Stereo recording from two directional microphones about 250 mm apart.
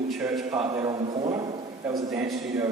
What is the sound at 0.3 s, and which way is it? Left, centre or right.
Speech, centre.